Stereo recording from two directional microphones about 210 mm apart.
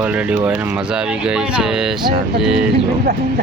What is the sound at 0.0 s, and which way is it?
Speech, 5° right (ahead or behind).